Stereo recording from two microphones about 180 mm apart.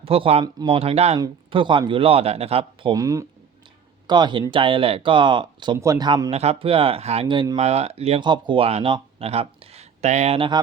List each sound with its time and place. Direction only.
0.0 s speech: 30° right (ahead or behind)
2.9 s speech: 20° right (ahead or behind)
6.3 s speech: 35° right (ahead or behind)
7.6 s speech: 35° right (ahead or behind)